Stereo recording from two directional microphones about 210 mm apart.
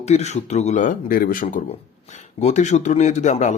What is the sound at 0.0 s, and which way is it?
Speech, 30° left (ahead or behind).